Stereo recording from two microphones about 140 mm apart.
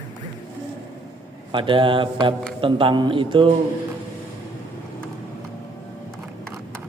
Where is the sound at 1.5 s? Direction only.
35° right (ahead or behind).